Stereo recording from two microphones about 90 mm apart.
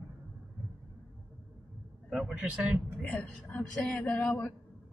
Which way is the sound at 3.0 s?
15° left (ahead or behind).